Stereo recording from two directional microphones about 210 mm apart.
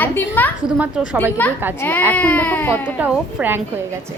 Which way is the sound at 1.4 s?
10° left (ahead or behind).